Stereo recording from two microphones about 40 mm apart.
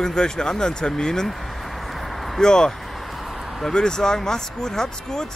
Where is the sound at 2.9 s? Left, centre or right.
Centre.